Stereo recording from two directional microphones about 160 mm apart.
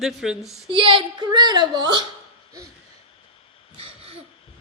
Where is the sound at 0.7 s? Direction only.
30° right (ahead or behind).